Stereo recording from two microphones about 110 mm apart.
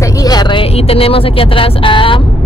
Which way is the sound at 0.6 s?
65° left (ahead or behind).